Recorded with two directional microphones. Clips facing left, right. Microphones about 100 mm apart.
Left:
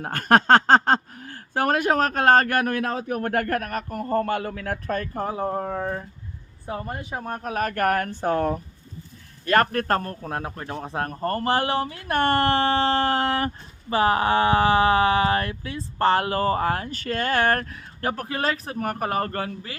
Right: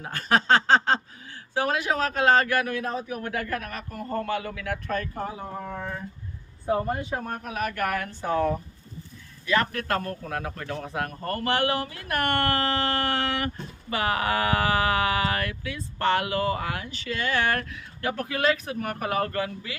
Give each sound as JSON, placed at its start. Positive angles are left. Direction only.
{"t": 0.0, "sound": "speech", "side_deg": 55}
{"t": 3.1, "sound": "speech", "side_deg": 55}
{"t": 6.7, "sound": "speech", "side_deg": 0}
{"t": 7.2, "sound": "speech", "side_deg": 30}